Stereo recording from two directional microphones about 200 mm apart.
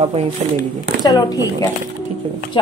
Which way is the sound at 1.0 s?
20° left (ahead or behind).